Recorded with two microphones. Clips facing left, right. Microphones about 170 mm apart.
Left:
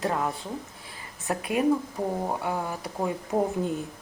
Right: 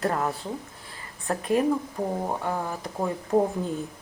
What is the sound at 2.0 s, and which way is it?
Speech, 5° left (ahead or behind).